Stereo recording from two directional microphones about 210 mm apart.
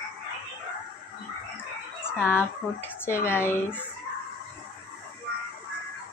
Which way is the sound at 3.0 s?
10° left (ahead or behind).